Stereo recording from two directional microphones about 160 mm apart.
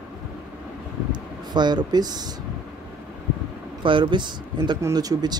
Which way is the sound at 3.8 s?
30° right (ahead or behind).